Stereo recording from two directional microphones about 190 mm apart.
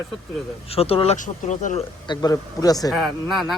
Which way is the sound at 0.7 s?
30° left (ahead or behind).